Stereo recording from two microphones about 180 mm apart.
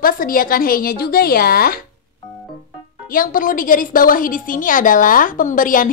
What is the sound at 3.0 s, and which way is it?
A woman's voice, 50° left (ahead or behind).